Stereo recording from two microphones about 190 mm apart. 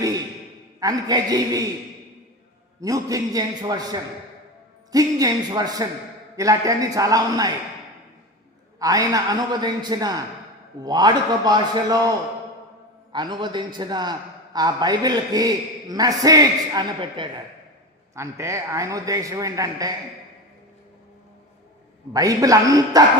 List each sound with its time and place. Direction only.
0.8 s a man's voice: 20° right (ahead or behind)
2.8 s a man's voice: 20° right (ahead or behind)
8.8 s a man's voice: 20° right (ahead or behind)
13.1 s a man's voice: 25° right (ahead or behind)
22.1 s a man's voice: 20° right (ahead or behind)